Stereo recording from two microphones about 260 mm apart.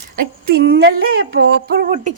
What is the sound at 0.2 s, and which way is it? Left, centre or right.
Speech, right.